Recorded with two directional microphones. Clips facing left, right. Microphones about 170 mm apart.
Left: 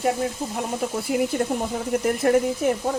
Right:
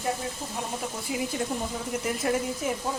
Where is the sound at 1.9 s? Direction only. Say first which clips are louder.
Left 8 dB; 60° left (ahead or behind).